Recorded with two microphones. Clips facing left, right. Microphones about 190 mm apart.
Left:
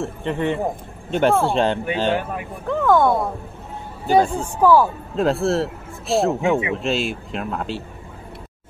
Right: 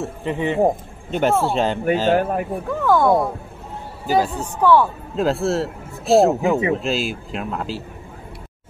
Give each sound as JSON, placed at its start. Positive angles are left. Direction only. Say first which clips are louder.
{"t": 0.0, "sound": "speech", "louder": "even", "side_deg": -5}
{"t": 2.0, "sound": "speech", "louder": "right 4 dB", "side_deg": -45}
{"t": 2.7, "sound": "speech", "louder": "even", "side_deg": 0}
{"t": 4.6, "sound": "speech", "louder": "left 1 dB", "side_deg": 5}